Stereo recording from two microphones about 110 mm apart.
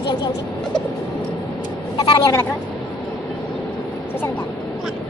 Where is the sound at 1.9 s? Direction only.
30° left (ahead or behind).